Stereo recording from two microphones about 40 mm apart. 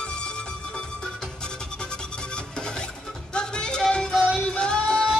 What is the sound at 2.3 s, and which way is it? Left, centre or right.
Music, left.